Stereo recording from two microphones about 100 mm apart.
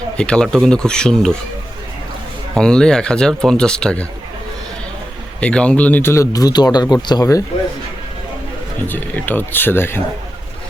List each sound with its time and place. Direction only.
0.2 s speech: 10° left (ahead or behind)
2.6 s speech: 5° left (ahead or behind)
5.4 s speech: 10° left (ahead or behind)
6.3 s speech: 40° left (ahead or behind)
8.9 s speech: 20° left (ahead or behind)